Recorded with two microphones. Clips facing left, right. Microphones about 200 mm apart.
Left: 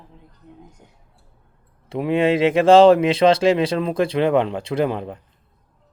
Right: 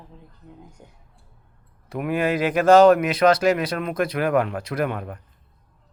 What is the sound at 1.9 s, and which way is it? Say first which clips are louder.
Speech: left 5 dB; 25° left (ahead or behind).